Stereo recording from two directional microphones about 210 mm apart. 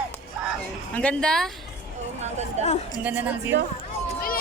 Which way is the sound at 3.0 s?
5° right (ahead or behind).